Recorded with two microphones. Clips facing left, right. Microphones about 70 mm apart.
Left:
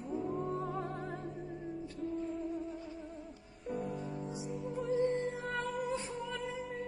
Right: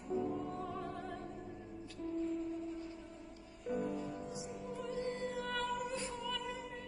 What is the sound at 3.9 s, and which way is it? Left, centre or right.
Music, left.